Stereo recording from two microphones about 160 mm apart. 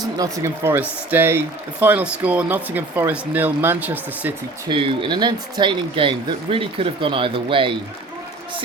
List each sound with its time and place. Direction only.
0.0 s speech: 20° right (ahead or behind)
4.7 s speech: 35° right (ahead or behind)